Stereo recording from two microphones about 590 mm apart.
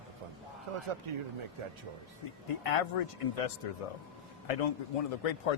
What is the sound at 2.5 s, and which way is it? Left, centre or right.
A man's voice, left.